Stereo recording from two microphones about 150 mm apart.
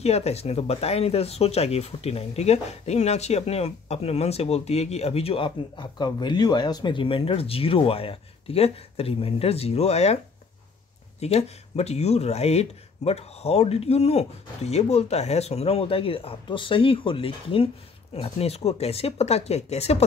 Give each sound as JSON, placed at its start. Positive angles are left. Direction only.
{"t": 0.0, "sound": "speech", "side_deg": 45}
{"t": 11.1, "sound": "speech", "side_deg": 45}